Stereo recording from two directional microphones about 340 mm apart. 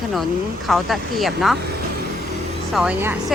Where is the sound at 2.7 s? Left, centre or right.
Centre.